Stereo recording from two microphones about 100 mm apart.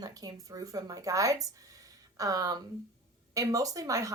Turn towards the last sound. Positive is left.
turn(degrees=-35)  # may be behind; listen again after turning